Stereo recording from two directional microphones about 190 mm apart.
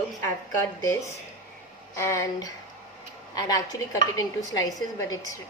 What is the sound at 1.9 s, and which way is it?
A woman's voice, 15° left (ahead or behind).